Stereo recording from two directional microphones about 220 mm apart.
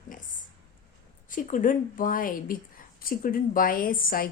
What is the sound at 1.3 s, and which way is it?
A woman's voice, 35° left (ahead or behind).